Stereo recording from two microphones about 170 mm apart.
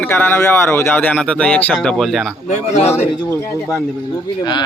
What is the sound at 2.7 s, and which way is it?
Speech, 40° left (ahead or behind).